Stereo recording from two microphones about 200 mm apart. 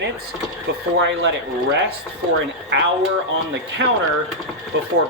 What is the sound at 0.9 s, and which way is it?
Speech, 65° right (ahead or behind).